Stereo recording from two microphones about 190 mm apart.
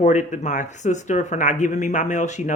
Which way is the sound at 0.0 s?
40° left (ahead or behind).